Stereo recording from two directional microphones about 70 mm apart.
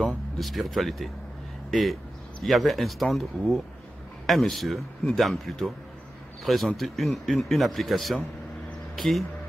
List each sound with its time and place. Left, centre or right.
0.0 s speech: centre